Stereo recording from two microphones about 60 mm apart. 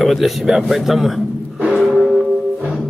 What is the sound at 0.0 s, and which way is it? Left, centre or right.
Speech, centre.